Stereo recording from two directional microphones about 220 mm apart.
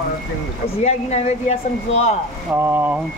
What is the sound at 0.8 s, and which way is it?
Speech, 30° left (ahead or behind).